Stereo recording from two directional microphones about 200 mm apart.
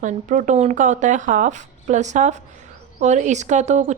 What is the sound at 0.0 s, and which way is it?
A woman's voice, 40° right (ahead or behind).